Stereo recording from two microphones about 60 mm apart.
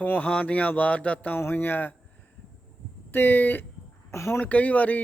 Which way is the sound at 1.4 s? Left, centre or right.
Left.